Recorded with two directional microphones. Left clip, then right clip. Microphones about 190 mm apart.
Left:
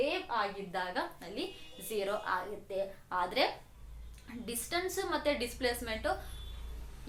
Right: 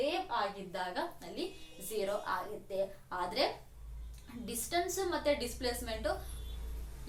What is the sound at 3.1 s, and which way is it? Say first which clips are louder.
Speech: left 4 dB; 20° left (ahead or behind).